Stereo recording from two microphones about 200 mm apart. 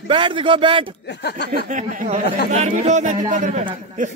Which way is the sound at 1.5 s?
40° right (ahead or behind).